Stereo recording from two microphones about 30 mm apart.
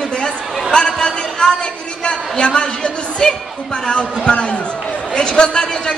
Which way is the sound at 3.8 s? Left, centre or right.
Left.